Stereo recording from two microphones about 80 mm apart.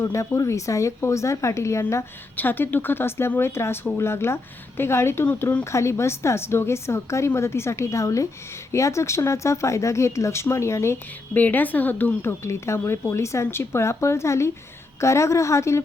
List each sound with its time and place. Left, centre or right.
0.0 s a woman's voice: left
2.3 s a woman's voice: left
11.3 s speech: left
12.4 s a woman's voice: left